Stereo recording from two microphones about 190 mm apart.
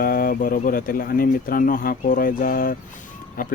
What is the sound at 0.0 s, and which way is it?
Speech, 50° left (ahead or behind).